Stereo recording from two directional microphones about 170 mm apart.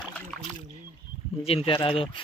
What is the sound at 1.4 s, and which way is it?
Speech, 35° left (ahead or behind).